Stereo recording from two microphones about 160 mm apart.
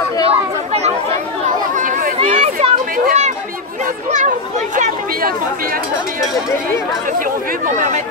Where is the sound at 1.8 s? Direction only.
55° right (ahead or behind).